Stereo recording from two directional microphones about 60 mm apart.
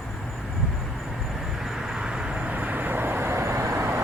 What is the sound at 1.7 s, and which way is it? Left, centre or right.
Vehicle, centre.